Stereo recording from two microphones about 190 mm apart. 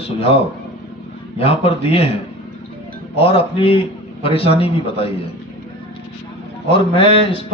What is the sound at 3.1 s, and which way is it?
A man's voice, 30° left (ahead or behind).